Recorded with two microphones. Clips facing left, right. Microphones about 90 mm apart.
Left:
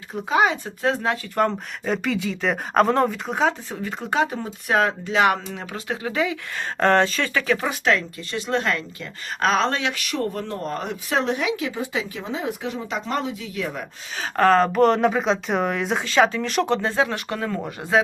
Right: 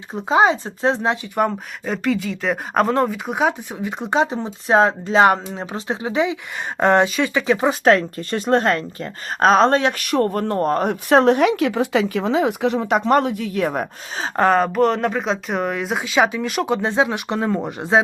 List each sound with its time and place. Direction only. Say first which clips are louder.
0.1 s speech: right 4 dB; 25° right (ahead or behind)
1.4 s speech: right 1 dB; 5° right (ahead or behind)
3.2 s speech: right 2 dB; 15° right (ahead or behind)
7.7 s speech: right 6 dB; 45° right (ahead or behind)
14.2 s speech: right 1 dB; 20° right (ahead or behind)
14.6 s speech: even; centre (ahead or behind)
16.8 s speech: right 3 dB; 20° right (ahead or behind)